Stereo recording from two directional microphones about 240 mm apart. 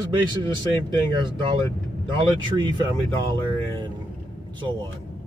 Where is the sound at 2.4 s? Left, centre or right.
Centre.